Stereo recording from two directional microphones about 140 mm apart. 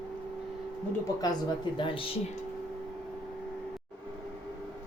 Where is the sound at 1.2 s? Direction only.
30° left (ahead or behind).